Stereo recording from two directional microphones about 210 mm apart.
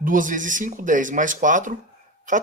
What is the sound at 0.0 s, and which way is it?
Speech, 40° right (ahead or behind).